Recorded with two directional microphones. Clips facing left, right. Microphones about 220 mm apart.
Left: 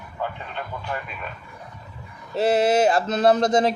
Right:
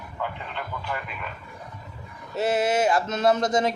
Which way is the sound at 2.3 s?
30° left (ahead or behind).